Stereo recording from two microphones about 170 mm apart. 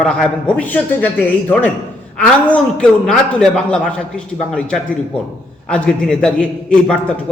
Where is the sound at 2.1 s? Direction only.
5° left (ahead or behind).